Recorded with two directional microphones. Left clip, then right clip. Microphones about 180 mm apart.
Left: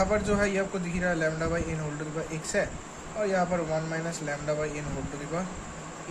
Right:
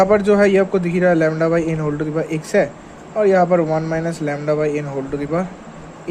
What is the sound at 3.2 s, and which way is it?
Speech, 50° right (ahead or behind).